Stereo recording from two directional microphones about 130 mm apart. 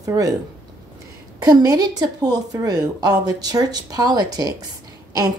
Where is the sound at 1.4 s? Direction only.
30° right (ahead or behind).